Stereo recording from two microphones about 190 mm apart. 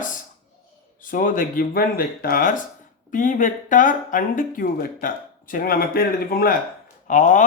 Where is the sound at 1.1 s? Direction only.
45° left (ahead or behind).